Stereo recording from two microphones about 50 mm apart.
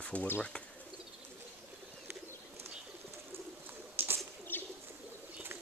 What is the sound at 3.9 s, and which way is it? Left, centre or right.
Bird, right.